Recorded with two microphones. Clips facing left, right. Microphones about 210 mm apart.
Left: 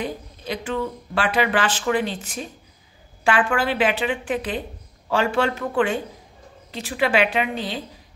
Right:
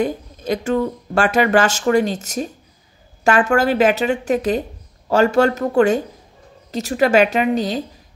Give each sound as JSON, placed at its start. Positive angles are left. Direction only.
{"t": 0.0, "sound": "speech", "side_deg": -45}